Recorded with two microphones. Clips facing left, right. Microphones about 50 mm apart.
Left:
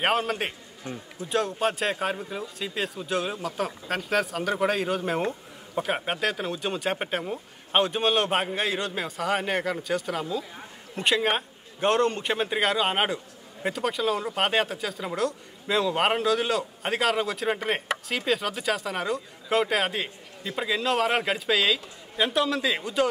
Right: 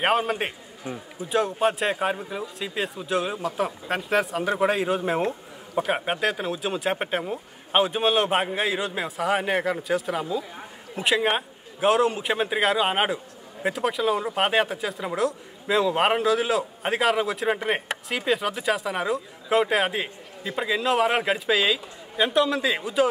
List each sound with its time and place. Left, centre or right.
0.0 s a man's voice: centre